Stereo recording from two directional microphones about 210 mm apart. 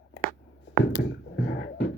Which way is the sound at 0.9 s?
45° left (ahead or behind).